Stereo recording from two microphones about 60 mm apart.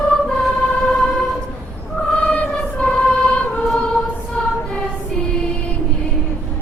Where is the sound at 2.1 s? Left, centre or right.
Left.